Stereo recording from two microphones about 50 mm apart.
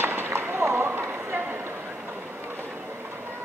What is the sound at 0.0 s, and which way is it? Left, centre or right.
Run, right.